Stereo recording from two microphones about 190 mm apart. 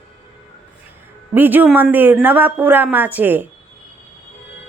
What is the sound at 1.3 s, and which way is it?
Speech, 10° right (ahead or behind).